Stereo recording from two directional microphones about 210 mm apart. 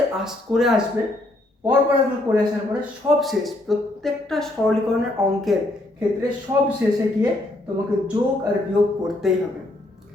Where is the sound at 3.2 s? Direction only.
Centre (ahead or behind).